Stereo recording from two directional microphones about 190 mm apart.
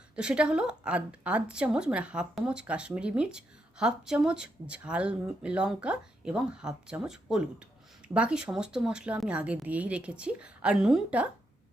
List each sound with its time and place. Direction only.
0.2 s a woman's voice: 5° right (ahead or behind)